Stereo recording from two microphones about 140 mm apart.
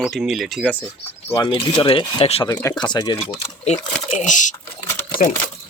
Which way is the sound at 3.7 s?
60° left (ahead or behind).